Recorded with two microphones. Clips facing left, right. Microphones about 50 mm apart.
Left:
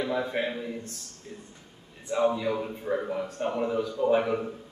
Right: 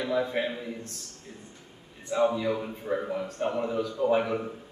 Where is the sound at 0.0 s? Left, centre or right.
Centre.